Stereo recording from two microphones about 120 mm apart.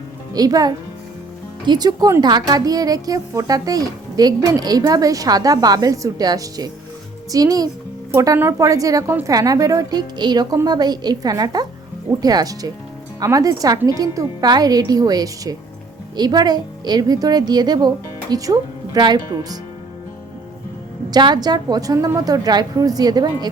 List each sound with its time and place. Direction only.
0.3 s a woman's voice: 30° right (ahead or behind)
21.1 s speech: 35° right (ahead or behind)